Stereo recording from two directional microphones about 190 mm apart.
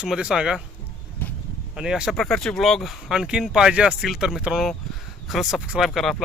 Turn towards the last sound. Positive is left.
turn(degrees=0)  # may be behind; listen again after turning